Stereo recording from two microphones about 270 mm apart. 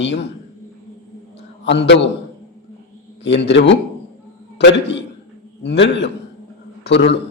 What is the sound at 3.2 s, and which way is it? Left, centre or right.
A man's voice, left.